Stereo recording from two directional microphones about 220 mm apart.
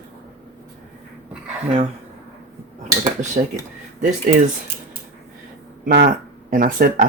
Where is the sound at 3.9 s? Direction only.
35° right (ahead or behind).